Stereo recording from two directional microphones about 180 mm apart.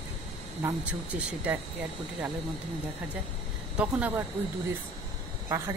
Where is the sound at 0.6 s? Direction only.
10° right (ahead or behind).